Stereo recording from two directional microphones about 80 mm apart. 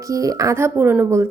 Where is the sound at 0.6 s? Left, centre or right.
Right.